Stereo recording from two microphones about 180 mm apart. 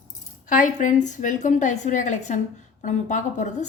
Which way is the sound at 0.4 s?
45° left (ahead or behind).